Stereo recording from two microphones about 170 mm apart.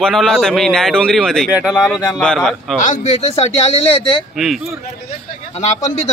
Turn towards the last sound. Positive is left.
turn(degrees=40)  # may be behind; listen again after turning